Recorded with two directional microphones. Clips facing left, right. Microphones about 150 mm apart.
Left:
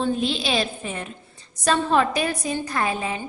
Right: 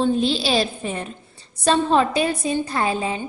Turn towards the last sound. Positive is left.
turn(degrees=-30)  # may be behind; listen again after turning